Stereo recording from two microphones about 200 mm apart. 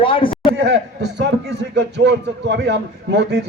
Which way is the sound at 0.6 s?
65° right (ahead or behind).